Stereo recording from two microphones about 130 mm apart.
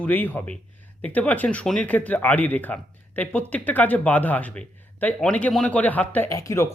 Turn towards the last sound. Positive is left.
turn(degrees=25)  # may be behind; listen again after turning